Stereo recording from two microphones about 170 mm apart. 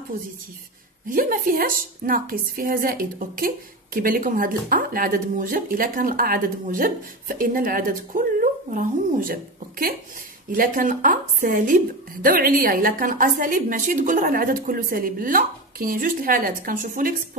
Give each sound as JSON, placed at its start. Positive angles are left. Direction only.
{"t": 1.1, "sound": "a woman's voice", "side_deg": -55}